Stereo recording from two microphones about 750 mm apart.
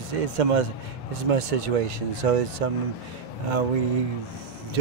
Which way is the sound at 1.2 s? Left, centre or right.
Right.